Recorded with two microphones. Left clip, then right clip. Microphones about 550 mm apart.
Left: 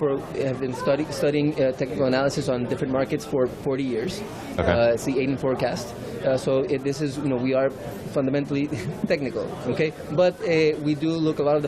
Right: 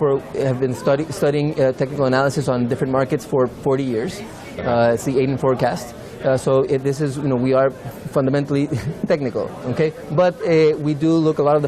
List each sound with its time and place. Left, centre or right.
0.0 s speech: right